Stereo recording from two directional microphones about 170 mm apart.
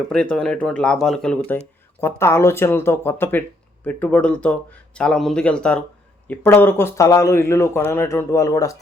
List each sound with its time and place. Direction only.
0.1 s speech: 5° left (ahead or behind)